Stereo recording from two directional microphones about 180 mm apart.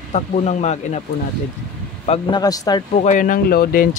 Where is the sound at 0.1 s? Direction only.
40° left (ahead or behind).